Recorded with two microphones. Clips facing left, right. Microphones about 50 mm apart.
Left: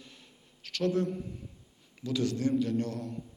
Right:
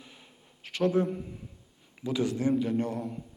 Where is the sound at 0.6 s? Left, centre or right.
Right.